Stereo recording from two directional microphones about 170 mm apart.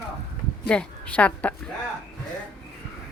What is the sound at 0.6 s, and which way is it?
Speech, 5° left (ahead or behind).